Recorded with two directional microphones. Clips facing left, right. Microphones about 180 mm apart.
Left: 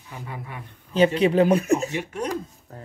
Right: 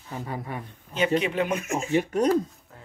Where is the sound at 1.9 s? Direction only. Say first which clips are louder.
Right 6 dB; 40° right (ahead or behind).